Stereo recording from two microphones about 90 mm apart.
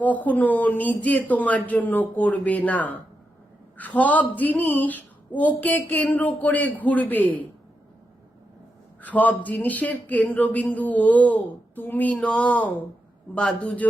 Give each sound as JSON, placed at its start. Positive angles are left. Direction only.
{"t": 0.0, "sound": "speech", "side_deg": 20}
{"t": 9.0, "sound": "speech", "side_deg": 20}